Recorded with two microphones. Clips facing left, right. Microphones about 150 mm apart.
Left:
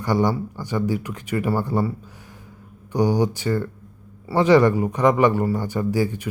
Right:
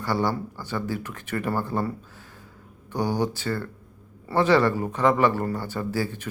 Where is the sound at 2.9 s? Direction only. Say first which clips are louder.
Left 5 dB; 15° left (ahead or behind).